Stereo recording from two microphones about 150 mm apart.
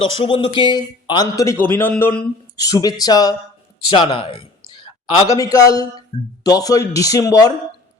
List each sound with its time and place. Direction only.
0.0 s speech: 35° left (ahead or behind); by 2.6 s 15° left (ahead or behind)
2.6 s speech: 25° left (ahead or behind)
3.8 s a sound: 35° left (ahead or behind)
5.4 s speech: 25° left (ahead or behind)